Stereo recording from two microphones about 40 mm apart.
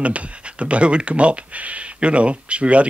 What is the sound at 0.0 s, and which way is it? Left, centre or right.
Speech, right.